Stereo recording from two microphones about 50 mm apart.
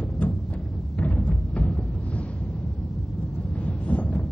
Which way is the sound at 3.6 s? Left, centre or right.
Left.